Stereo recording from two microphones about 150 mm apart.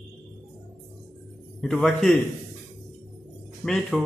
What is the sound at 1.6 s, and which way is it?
Speech, 5° left (ahead or behind).